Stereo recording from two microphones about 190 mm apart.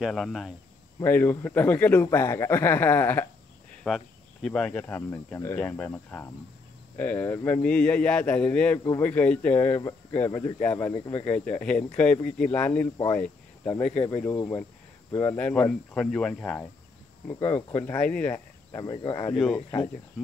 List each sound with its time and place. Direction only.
0.0 s speech: centre (ahead or behind)
1.0 s speech: 10° left (ahead or behind)
8.7 s speech: 15° left (ahead or behind)
12.9 s speech: 20° left (ahead or behind)
17.7 s speech: 10° left (ahead or behind)
19.3 s speech: centre (ahead or behind)